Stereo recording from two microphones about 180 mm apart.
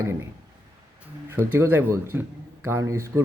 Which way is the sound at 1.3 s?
10° right (ahead or behind).